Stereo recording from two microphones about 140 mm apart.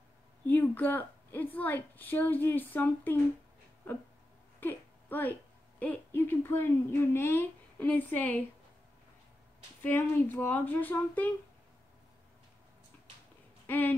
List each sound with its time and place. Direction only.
0.5 s speech: 15° left (ahead or behind)
4.6 s a sound: 15° left (ahead or behind)
5.8 s speech: 10° left (ahead or behind)
9.8 s speech: 15° left (ahead or behind)
13.7 s speech: 15° left (ahead or behind)